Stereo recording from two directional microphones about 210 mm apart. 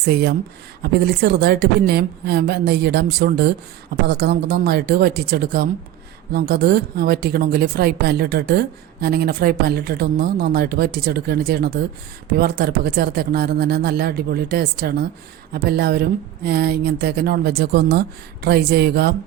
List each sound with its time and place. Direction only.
0.0 s a woman's voice: 50° right (ahead or behind)